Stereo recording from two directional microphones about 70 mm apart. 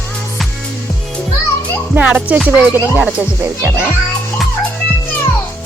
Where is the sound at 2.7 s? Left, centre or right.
Right.